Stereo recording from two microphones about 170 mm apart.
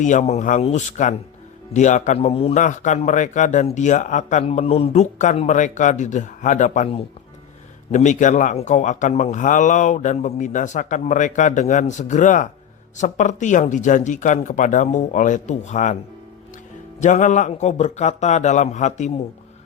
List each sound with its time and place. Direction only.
0.0 s a man's voice: 45° left (ahead or behind)
17.0 s a man's voice: 45° left (ahead or behind)